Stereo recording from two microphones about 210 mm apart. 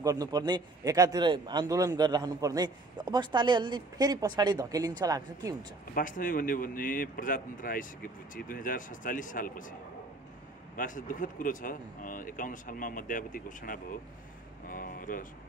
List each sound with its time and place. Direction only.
0.0 s a man's voice: 15° right (ahead or behind)
5.9 s speech: 40° left (ahead or behind)
10.8 s speech: 40° left (ahead or behind)